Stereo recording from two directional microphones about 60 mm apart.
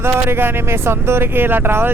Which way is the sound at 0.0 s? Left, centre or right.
Right.